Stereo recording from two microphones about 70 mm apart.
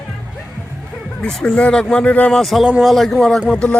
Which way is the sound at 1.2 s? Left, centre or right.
Centre.